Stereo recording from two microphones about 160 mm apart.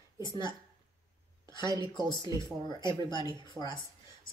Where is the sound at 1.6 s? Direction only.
20° right (ahead or behind).